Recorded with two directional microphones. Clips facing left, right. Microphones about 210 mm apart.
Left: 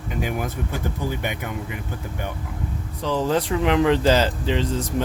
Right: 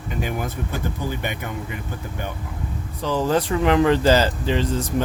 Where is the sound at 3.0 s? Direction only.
5° right (ahead or behind).